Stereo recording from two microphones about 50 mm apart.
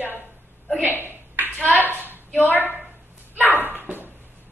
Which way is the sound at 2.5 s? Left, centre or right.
Left.